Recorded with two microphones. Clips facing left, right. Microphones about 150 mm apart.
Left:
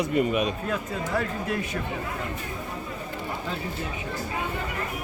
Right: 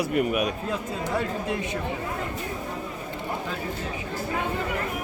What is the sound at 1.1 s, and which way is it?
Speech, 20° right (ahead or behind).